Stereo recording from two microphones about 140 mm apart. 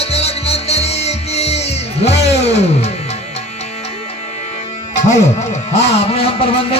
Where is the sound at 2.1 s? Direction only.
50° left (ahead or behind).